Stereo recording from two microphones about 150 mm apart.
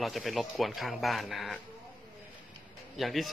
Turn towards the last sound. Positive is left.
turn(degrees=0)  # may be behind; listen again after turning